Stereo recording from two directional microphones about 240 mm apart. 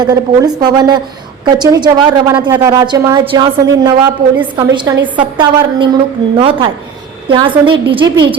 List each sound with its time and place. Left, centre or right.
0.0 s a woman's voice: centre